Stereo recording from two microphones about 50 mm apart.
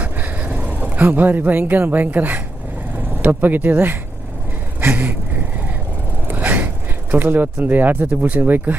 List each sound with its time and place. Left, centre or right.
0.0 s vehicle: right
1.0 s speech: right
4.8 s vehicle: right
6.2 s vehicle: right
7.1 s speech: right